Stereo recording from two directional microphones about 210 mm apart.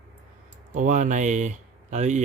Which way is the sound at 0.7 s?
35° right (ahead or behind).